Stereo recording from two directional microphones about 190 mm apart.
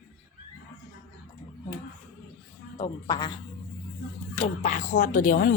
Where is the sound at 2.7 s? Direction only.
20° left (ahead or behind).